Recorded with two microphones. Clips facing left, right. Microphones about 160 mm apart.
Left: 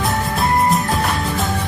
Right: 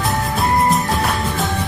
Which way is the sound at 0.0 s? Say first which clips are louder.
Even; centre (ahead or behind).